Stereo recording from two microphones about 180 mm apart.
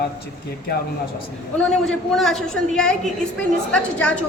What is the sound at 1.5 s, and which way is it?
A woman's voice, 5° left (ahead or behind).